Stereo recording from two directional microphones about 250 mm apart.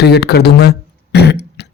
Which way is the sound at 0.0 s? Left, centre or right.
Left.